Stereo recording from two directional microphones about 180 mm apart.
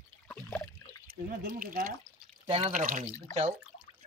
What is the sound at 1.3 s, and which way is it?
Speech, 55° right (ahead or behind).